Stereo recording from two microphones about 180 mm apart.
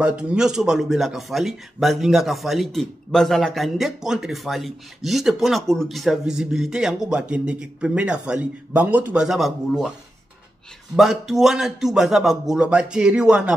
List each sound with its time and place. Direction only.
0.0 s speech: 5° right (ahead or behind)
11.0 s speech: centre (ahead or behind)